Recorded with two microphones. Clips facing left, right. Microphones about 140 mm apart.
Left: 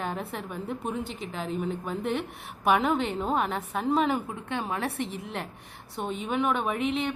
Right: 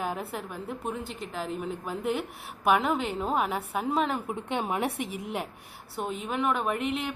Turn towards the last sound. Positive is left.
turn(degrees=0)  # may be behind; listen again after turning